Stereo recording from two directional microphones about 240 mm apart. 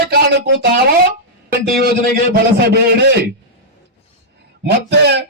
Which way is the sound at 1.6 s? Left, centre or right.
Right.